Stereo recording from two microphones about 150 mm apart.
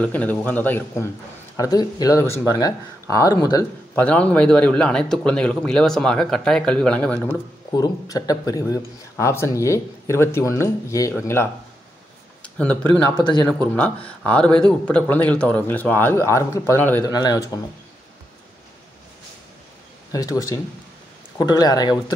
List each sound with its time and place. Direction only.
0.0 s speech: 10° left (ahead or behind)
1.6 s speech: 25° left (ahead or behind)
3.9 s a man's voice: 10° left (ahead or behind)
7.7 s speech: 25° left (ahead or behind)
17.0 s speech: 25° left (ahead or behind)
20.1 s speech: 25° left (ahead or behind)